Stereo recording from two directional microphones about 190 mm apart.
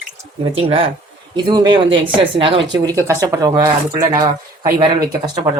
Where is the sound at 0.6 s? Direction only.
30° right (ahead or behind).